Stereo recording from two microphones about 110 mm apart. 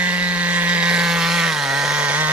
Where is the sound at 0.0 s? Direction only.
15° right (ahead or behind).